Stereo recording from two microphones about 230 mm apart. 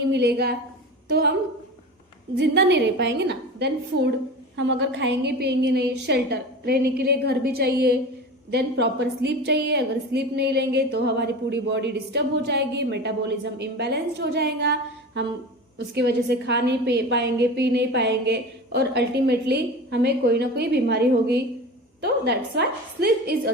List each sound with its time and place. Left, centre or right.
0.1 s a woman's voice: right
2.4 s a woman's voice: right